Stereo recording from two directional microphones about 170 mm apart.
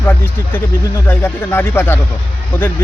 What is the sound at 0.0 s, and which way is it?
Speech, 15° left (ahead or behind).